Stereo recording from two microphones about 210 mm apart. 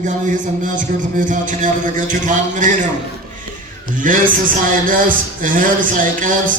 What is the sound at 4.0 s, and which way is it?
A man's voice, 40° right (ahead or behind).